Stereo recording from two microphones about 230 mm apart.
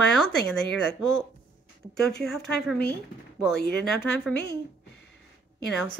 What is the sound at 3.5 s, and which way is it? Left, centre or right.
Speech, left.